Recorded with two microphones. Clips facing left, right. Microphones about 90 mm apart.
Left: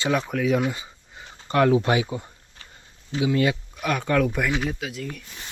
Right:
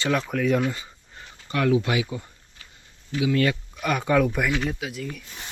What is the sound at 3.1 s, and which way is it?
Speech, 25° left (ahead or behind).